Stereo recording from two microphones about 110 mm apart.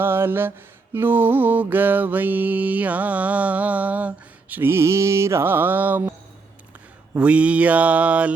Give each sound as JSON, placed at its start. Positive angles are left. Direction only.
{"t": 0.0, "sound": "mantra", "side_deg": -20}